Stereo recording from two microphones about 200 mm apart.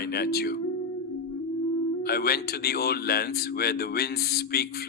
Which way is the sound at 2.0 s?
50° left (ahead or behind).